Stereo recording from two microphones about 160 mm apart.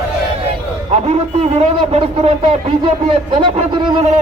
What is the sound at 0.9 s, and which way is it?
A man's voice, 40° right (ahead or behind).